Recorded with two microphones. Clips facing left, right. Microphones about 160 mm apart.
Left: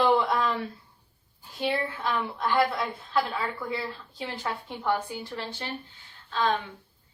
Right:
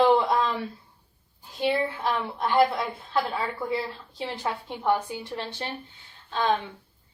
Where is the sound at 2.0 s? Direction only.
25° right (ahead or behind).